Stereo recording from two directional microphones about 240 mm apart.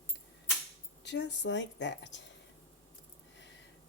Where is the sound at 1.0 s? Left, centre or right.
Left.